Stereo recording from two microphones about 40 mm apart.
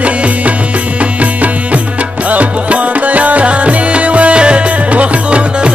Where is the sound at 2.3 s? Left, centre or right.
Right.